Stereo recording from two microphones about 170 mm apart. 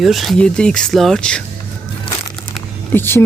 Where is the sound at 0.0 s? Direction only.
Centre (ahead or behind).